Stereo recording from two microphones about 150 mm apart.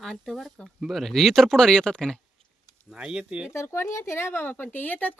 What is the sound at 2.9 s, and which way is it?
Speech, 5° right (ahead or behind).